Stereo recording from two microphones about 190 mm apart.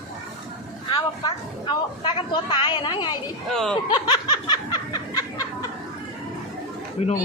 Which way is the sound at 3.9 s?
25° left (ahead or behind).